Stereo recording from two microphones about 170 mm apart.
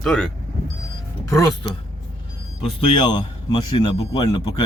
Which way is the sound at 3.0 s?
25° left (ahead or behind).